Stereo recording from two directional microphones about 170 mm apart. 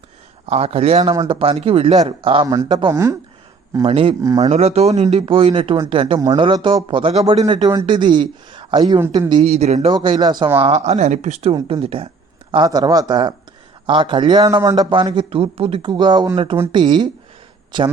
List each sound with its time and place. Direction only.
0.4 s a man's voice: 40° right (ahead or behind)
2.9 s speech: 15° right (ahead or behind)
3.8 s a man's voice: 35° right (ahead or behind)
9.0 s speech: 15° right (ahead or behind)
9.3 s speech: 35° right (ahead or behind)
9.9 s a man's voice: 25° right (ahead or behind)
10.6 s a man's voice: 40° right (ahead or behind)